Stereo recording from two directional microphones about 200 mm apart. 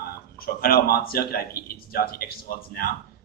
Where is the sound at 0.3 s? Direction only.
50° left (ahead or behind).